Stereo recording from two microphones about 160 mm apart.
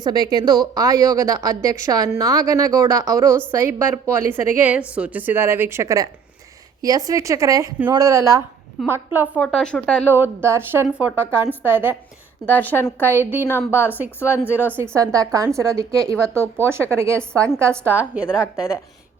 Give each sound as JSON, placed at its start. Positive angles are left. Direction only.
{"t": 0.0, "sound": "a woman's voice", "side_deg": -25}
{"t": 9.3, "sound": "speech", "side_deg": 5}
{"t": 10.1, "sound": "a woman's voice", "side_deg": -15}
{"t": 12.5, "sound": "a woman's voice", "side_deg": 10}
{"t": 15.1, "sound": "a woman's voice", "side_deg": -20}